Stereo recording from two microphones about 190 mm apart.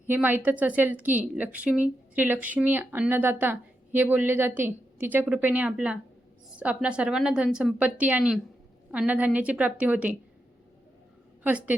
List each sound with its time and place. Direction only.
0.1 s a woman's voice: 10° right (ahead or behind)
11.4 s a woman's voice: 10° right (ahead or behind)